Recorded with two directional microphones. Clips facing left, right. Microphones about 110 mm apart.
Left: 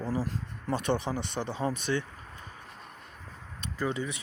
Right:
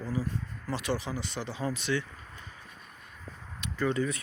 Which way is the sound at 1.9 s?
30° left (ahead or behind).